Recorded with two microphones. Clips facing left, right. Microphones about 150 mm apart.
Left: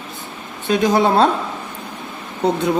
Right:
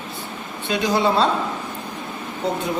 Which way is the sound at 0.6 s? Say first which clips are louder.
Left 4 dB; 50° left (ahead or behind).